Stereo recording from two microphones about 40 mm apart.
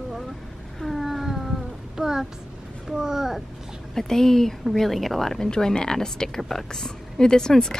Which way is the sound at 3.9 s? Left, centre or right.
Centre.